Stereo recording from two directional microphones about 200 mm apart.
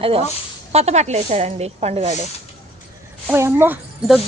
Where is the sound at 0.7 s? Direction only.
30° right (ahead or behind).